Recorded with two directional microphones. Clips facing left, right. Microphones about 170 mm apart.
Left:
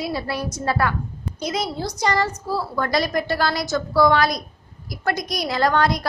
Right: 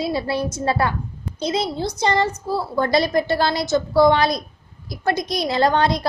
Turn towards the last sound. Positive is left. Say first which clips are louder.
# right 2 dB
turn(degrees=-25)  # may be behind; listen again after turning